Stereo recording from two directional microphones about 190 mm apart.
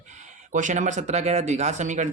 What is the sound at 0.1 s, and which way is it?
Speech, 40° right (ahead or behind).